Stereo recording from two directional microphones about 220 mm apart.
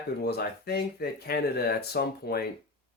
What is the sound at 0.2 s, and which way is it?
Speech, 45° left (ahead or behind).